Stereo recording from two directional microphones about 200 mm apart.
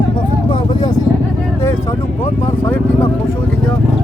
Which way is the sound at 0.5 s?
20° left (ahead or behind).